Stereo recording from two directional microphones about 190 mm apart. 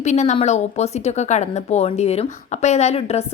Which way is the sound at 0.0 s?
40° left (ahead or behind).